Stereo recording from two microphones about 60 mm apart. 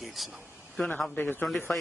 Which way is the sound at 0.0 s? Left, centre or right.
Centre.